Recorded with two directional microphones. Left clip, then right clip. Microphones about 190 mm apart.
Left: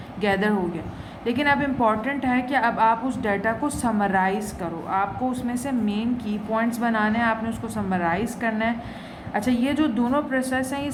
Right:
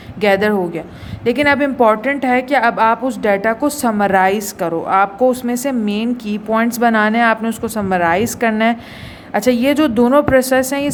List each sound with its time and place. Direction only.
0.2 s a woman's voice: 45° right (ahead or behind)